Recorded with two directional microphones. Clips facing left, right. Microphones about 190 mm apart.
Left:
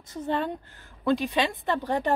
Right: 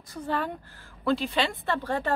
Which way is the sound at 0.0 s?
20° left (ahead or behind).